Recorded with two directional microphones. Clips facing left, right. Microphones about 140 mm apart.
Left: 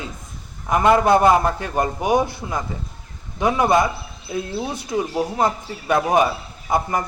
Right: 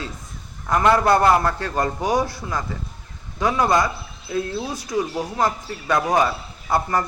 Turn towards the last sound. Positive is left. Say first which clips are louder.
# even
turn(degrees=20)  # may be behind; listen again after turning